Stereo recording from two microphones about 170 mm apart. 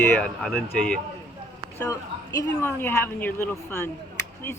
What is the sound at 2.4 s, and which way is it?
Speech, 15° left (ahead or behind).